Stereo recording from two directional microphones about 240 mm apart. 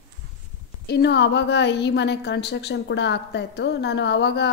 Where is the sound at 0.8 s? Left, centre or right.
Left.